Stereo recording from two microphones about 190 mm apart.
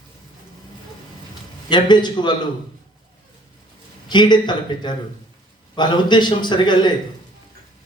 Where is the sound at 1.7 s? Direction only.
25° left (ahead or behind).